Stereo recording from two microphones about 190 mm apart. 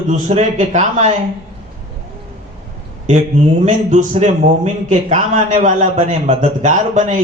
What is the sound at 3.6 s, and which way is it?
A man's voice, 40° right (ahead or behind).